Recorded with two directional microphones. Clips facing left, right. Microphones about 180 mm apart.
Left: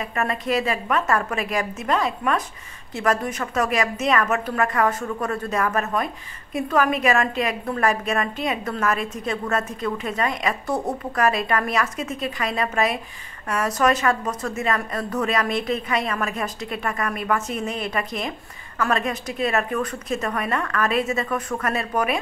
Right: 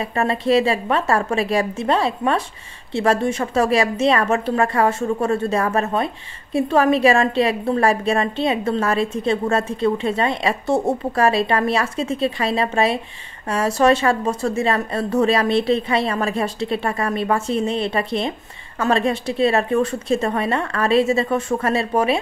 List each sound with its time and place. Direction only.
0.0 s a woman's voice: 30° right (ahead or behind)